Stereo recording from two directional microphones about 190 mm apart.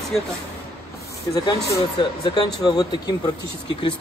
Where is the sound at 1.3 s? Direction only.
20° left (ahead or behind).